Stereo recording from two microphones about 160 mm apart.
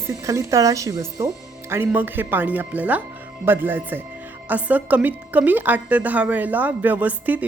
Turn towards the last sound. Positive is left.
turn(degrees=-10)  # may be behind; listen again after turning